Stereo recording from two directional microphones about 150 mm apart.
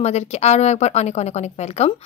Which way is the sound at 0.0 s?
45° left (ahead or behind).